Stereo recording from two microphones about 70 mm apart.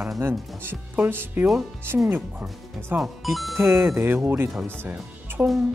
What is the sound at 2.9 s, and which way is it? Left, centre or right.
Speech, centre.